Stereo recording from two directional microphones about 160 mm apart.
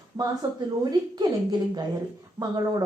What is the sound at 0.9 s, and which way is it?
Speech, 25° right (ahead or behind).